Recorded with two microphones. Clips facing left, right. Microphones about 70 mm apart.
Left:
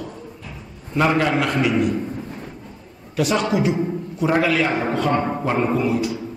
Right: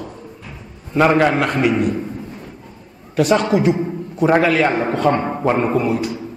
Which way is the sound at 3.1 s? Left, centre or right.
Right.